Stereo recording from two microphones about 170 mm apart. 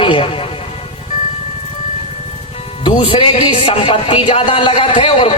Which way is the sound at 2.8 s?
30° left (ahead or behind).